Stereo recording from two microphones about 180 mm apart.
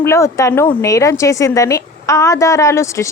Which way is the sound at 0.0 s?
15° left (ahead or behind).